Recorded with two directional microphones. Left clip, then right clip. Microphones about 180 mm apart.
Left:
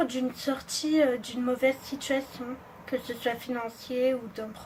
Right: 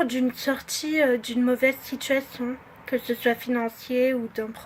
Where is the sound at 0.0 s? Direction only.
45° right (ahead or behind).